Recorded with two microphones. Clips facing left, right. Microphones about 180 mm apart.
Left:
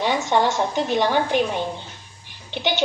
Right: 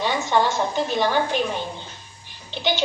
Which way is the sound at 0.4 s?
75° left (ahead or behind).